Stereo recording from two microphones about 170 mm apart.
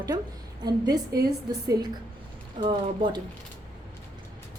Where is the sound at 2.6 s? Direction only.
25° right (ahead or behind).